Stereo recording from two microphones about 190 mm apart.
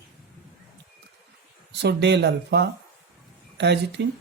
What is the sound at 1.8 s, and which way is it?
Speech, 65° right (ahead or behind).